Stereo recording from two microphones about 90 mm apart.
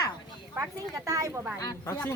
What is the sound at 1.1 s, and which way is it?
Speech, 35° right (ahead or behind).